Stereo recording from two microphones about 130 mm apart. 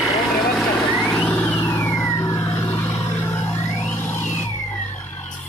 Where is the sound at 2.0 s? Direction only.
25° left (ahead or behind).